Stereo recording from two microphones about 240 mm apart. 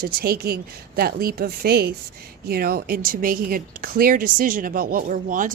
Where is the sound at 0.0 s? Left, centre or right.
Right.